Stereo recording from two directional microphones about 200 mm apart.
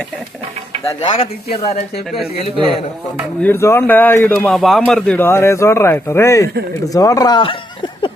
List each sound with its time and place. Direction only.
1.0 s speech: 30° left (ahead or behind)
3.4 s speech: 10° left (ahead or behind)